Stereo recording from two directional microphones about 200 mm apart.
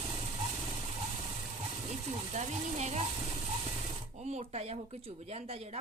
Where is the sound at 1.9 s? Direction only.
35° right (ahead or behind).